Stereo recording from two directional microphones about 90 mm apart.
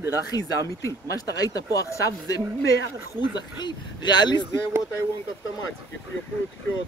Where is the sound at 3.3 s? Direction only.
55° left (ahead or behind).